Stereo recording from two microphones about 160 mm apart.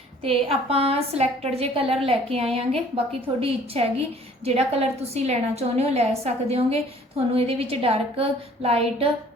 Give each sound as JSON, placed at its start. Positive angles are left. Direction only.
{"t": 0.3, "sound": "a woman's voice", "side_deg": -40}